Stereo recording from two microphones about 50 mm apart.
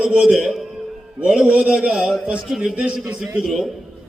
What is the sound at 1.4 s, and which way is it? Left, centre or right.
Speech, centre.